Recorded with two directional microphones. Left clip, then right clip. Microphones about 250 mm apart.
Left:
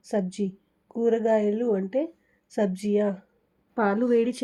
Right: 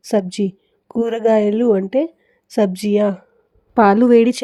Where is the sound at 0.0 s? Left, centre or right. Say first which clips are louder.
Right 10 dB; right.